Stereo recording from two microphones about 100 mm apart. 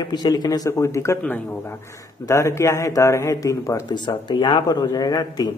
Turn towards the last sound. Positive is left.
turn(degrees=40)  # may be behind; listen again after turning